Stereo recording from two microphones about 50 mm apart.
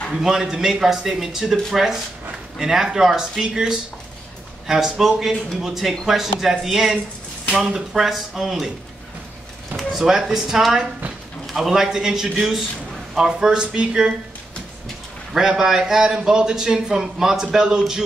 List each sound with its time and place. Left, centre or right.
0.1 s a man's voice: centre
7.9 s speech: centre
9.8 s a sound: centre
10.0 s a man's voice: centre
15.3 s a man's voice: centre